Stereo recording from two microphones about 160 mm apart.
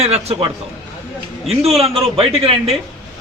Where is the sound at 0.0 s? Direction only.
40° right (ahead or behind).